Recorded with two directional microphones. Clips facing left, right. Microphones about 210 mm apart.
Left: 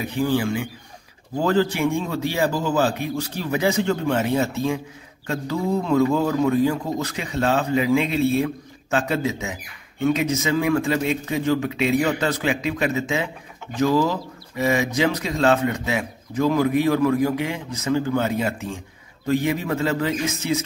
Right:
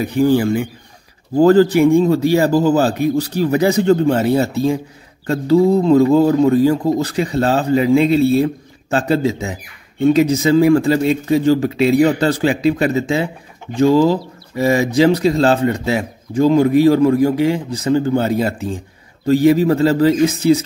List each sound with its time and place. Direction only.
0.0 s speech: 40° right (ahead or behind)